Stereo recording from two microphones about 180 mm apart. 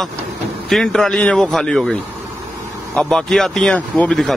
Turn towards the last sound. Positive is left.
turn(degrees=5)  # may be behind; listen again after turning